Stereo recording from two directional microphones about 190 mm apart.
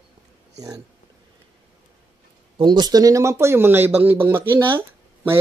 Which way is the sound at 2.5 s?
25° right (ahead or behind).